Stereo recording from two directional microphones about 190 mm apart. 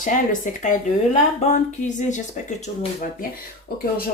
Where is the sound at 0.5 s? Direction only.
45° left (ahead or behind).